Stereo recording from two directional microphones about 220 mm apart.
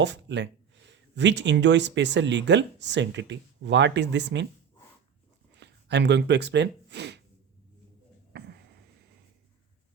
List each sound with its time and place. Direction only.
0.0 s speech: 55° right (ahead or behind)
5.5 s speech: 50° right (ahead or behind)
8.3 s a sound: 50° right (ahead or behind)